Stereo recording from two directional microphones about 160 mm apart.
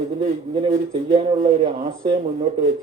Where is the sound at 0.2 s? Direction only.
30° right (ahead or behind).